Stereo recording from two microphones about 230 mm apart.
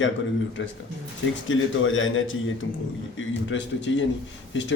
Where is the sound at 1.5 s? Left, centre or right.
Left.